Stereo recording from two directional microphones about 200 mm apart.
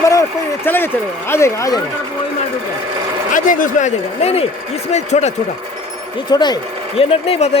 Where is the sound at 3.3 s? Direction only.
40° left (ahead or behind).